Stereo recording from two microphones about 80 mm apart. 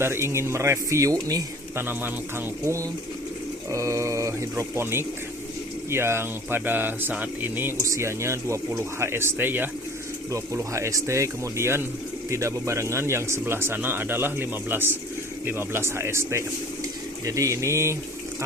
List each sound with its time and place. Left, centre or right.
0.0 s speech: right
1.7 s speech: right
2.6 s speech: right
7.9 s speech: right
10.3 s speech: right